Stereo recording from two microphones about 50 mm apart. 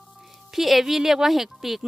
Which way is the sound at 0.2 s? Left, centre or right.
Centre.